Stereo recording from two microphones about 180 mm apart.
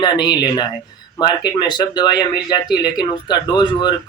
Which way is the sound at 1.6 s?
25° left (ahead or behind).